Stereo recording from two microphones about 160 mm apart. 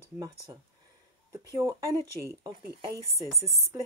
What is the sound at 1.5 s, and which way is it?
Speech, 20° right (ahead or behind).